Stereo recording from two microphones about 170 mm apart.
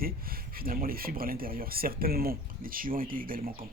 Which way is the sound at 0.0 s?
60° right (ahead or behind).